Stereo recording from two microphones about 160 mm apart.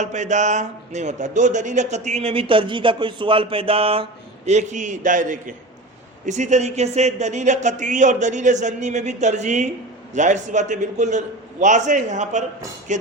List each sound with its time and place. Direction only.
0.0 s speech: 50° right (ahead or behind)
4.4 s speech: 45° right (ahead or behind)